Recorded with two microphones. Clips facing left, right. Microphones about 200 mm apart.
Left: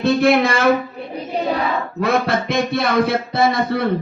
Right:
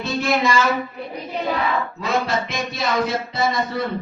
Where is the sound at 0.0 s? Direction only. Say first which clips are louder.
Left 7 dB; 60° left (ahead or behind).